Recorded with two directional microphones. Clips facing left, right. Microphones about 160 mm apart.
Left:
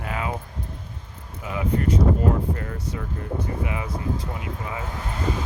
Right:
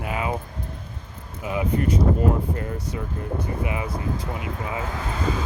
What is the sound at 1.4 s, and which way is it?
Speech, 15° right (ahead or behind).